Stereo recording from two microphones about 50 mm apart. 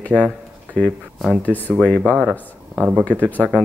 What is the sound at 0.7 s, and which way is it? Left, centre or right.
Speech, centre.